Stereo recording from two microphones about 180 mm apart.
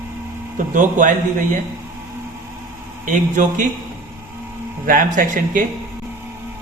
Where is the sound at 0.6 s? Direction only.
45° right (ahead or behind).